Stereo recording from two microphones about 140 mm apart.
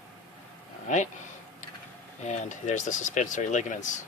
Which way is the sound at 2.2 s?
60° left (ahead or behind).